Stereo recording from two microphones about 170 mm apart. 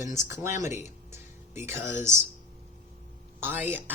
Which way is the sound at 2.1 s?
15° right (ahead or behind).